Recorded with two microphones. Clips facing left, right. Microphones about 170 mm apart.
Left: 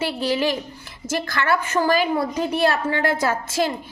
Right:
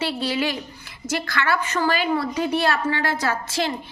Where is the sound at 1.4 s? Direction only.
50° left (ahead or behind).